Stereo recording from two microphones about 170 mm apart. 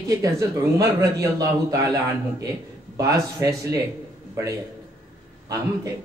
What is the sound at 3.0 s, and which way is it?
Speech, 20° right (ahead or behind).